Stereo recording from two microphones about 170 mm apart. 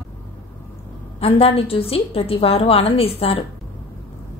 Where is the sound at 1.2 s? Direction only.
35° left (ahead or behind).